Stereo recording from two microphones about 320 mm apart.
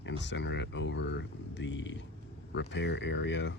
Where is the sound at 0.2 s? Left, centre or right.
Left.